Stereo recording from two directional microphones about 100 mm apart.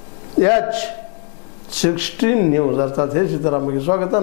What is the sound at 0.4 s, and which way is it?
Speech, 20° left (ahead or behind).